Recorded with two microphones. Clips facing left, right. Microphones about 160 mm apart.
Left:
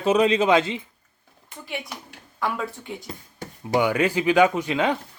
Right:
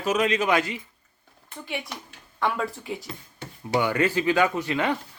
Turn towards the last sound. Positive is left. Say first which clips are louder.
# left 2 dB
turn(degrees=15)  # may be behind; listen again after turning